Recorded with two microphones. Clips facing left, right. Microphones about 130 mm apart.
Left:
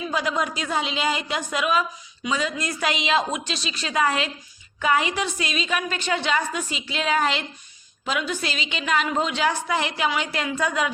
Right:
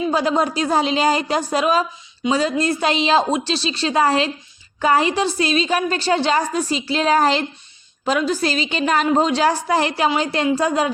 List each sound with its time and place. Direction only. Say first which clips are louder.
0.1 s a woman's voice: right 4 dB; 30° right (ahead or behind)